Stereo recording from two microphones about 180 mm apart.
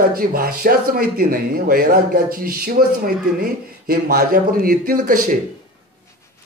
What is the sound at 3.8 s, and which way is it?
A man's voice, 55° right (ahead or behind).